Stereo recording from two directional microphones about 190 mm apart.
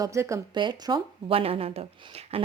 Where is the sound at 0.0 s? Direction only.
15° right (ahead or behind).